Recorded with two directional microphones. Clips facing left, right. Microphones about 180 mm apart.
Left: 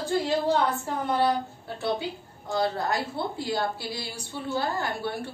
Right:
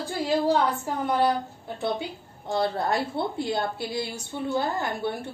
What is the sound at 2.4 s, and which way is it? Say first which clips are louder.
A woman's voice: right 1 dB; 25° right (ahead or behind).